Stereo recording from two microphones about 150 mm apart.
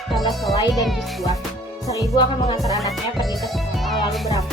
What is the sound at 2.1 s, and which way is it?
Music, 25° left (ahead or behind).